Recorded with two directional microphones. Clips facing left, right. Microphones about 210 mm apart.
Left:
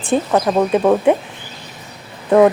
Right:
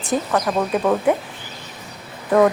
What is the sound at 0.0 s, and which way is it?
Speech, 30° left (ahead or behind).